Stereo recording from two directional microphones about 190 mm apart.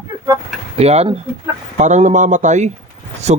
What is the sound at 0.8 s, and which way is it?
Speech, 35° right (ahead or behind).